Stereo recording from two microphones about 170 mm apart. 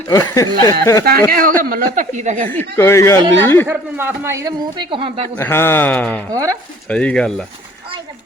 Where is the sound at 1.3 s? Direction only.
55° right (ahead or behind).